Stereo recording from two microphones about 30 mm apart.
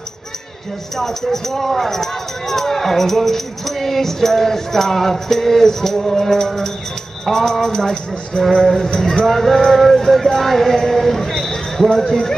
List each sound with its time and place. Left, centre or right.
0.9 s speech: centre
7.6 s speech: centre